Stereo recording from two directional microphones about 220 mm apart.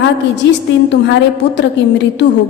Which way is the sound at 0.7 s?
55° left (ahead or behind).